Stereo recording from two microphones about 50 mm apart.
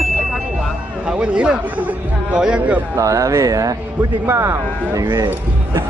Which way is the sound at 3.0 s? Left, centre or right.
Right.